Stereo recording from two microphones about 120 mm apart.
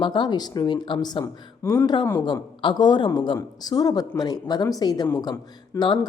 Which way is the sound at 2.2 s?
40° left (ahead or behind).